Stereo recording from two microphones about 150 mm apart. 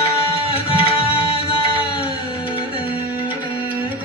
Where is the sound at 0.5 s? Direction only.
40° left (ahead or behind).